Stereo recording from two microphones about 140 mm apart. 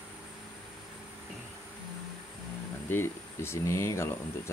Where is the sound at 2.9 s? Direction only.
15° left (ahead or behind).